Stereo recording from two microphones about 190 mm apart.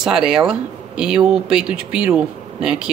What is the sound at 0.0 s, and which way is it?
Speech, 5° right (ahead or behind).